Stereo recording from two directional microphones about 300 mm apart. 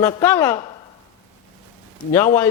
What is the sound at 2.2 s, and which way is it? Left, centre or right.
Speech, centre.